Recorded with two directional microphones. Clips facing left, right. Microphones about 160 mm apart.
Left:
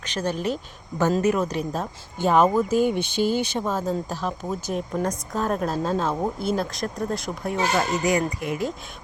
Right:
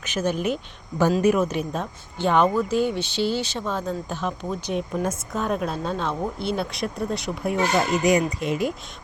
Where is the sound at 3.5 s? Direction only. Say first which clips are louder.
Left 2 dB; 10° left (ahead or behind).